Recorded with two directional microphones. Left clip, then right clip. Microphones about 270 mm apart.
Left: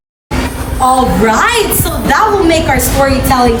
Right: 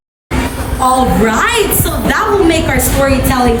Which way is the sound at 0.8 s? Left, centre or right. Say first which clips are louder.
Left 1 dB; centre.